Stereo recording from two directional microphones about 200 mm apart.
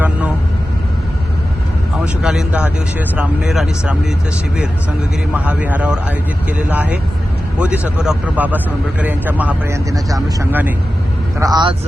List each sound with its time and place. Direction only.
2.2 s speech: 5° right (ahead or behind)
5.3 s speech: 10° right (ahead or behind)
11.3 s speech: 20° right (ahead or behind)